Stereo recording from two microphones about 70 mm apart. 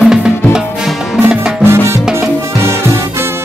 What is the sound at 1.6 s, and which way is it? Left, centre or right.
Salsa music, right.